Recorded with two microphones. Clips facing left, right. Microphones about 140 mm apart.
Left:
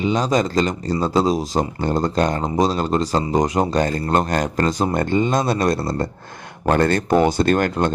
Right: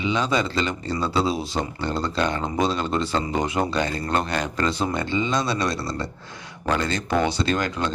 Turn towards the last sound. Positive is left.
turn(degrees=55)  # may be behind; listen again after turning